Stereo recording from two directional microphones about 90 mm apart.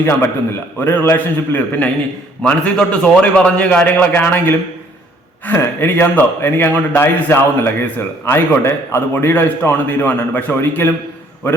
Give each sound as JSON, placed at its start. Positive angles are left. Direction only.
{"t": 0.0, "sound": "a man's voice", "side_deg": 25}